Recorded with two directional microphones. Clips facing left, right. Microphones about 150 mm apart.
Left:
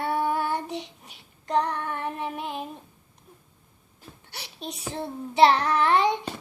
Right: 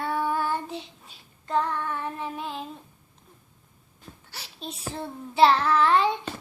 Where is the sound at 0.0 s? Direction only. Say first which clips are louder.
Left 1 dB; 15° left (ahead or behind).